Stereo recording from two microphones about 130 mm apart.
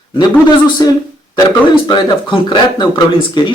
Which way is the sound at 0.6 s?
35° left (ahead or behind).